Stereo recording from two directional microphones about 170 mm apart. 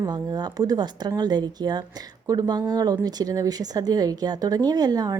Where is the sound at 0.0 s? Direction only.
25° right (ahead or behind).